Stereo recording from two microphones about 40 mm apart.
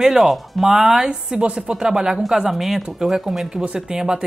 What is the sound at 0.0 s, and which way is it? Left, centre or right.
Speech, centre.